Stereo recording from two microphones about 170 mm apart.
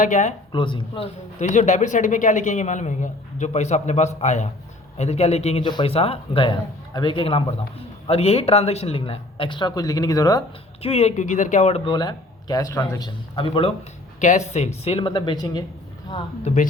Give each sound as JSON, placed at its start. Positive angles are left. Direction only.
{"t": 0.0, "sound": "speech", "side_deg": 45}
{"t": 0.5, "sound": "a man's voice", "side_deg": 30}
{"t": 1.4, "sound": "speech", "side_deg": 45}
{"t": 10.8, "sound": "speech", "side_deg": 35}
{"t": 11.9, "sound": "a man's voice", "side_deg": 25}
{"t": 14.2, "sound": "speech", "side_deg": 45}
{"t": 14.8, "sound": "a man's voice", "side_deg": 30}